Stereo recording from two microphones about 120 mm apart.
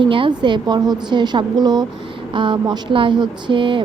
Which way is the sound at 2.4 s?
40° right (ahead or behind).